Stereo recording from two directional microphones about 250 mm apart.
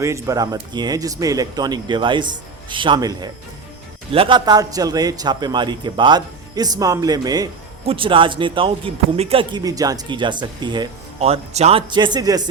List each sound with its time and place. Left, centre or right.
0.0 s a man's voice: centre